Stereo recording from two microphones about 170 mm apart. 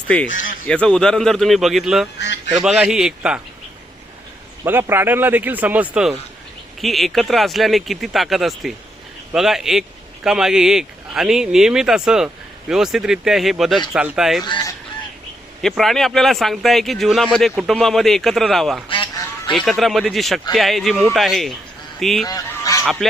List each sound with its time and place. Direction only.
0.7 s speech: 5° left (ahead or behind)
2.1 s speech: 90° left
2.6 s speech: 5° right (ahead or behind)
4.6 s speech: 15° right (ahead or behind)
14.4 s speech: 25° left (ahead or behind)
15.6 s speech: centre (ahead or behind)
18.9 s duck: 30° left (ahead or behind)
19.5 s speech: centre (ahead or behind)
22.3 s honk: 20° left (ahead or behind)
22.8 s speech: centre (ahead or behind)